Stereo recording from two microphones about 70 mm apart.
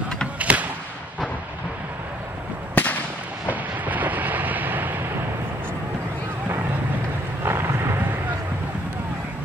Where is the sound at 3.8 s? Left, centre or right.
Right.